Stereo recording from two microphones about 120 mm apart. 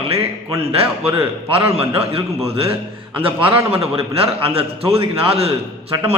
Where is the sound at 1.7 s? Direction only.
55° right (ahead or behind).